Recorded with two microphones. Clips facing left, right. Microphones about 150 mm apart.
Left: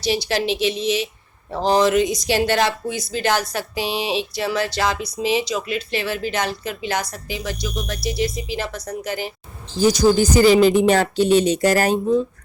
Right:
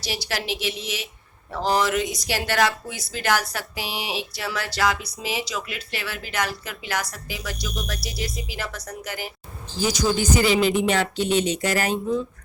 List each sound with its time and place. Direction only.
0.0 s speech: 20° left (ahead or behind)
9.8 s speech: 35° left (ahead or behind)